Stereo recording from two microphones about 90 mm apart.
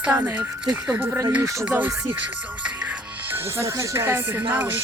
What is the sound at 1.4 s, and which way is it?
Speech, 35° right (ahead or behind).